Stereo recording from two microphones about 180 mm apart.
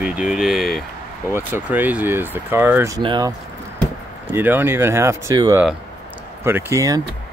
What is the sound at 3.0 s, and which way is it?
Speech, 25° right (ahead or behind).